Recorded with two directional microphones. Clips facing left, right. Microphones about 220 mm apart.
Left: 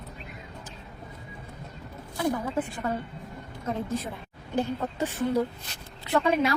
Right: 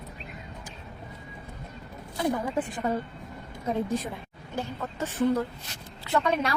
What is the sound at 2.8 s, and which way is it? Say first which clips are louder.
A woman's voice: right 2 dB; 15° right (ahead or behind).